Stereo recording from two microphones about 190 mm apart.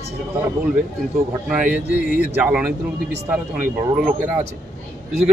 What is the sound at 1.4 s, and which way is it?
Speech, 5° right (ahead or behind).